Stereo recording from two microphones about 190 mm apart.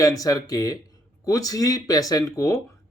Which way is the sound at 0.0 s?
20° left (ahead or behind).